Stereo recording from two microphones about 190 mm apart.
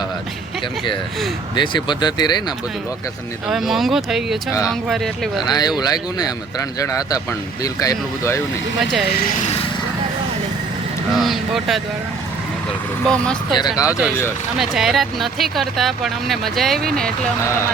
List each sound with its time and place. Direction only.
1.5 s speech: 25° left (ahead or behind)
3.4 s speech: centre (ahead or behind)
5.5 s speech: 20° left (ahead or behind)
8.8 s speech: centre (ahead or behind)
11.1 s speech: centre (ahead or behind)
13.1 s speech: 5° left (ahead or behind)
13.6 s speech: 20° left (ahead or behind)
14.5 s speech: centre (ahead or behind)